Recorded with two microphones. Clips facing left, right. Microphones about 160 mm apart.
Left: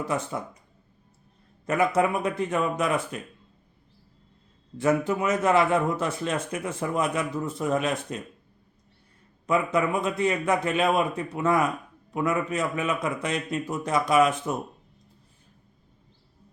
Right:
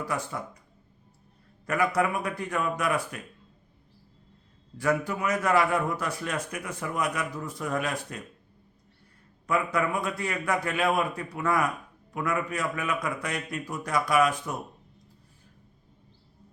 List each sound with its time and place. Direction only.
0.0 s a man's voice: 20° left (ahead or behind)
1.6 s a man's voice: 20° left (ahead or behind)
4.8 s a man's voice: 20° left (ahead or behind)
9.5 s a man's voice: 20° left (ahead or behind)